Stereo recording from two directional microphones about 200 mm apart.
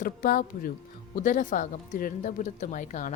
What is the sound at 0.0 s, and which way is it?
Speech, 45° left (ahead or behind).